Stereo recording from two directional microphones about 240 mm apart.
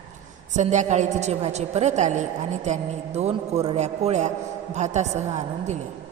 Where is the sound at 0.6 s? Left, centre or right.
Right.